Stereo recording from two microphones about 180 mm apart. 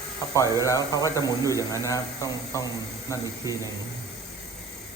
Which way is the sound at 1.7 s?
20° left (ahead or behind).